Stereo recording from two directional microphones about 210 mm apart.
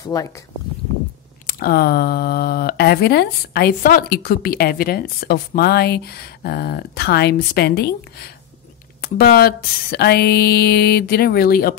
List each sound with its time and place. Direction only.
0.0 s speech: 15° left (ahead or behind)
1.5 s speech: 45° left (ahead or behind)
9.0 s speech: 45° left (ahead or behind)